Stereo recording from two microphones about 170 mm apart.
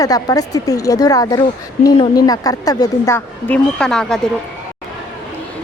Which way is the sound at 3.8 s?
5° left (ahead or behind).